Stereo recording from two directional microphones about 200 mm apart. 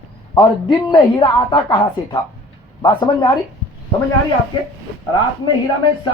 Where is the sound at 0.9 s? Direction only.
20° left (ahead or behind).